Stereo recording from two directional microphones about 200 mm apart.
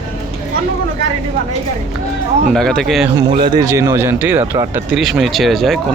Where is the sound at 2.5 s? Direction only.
Centre (ahead or behind).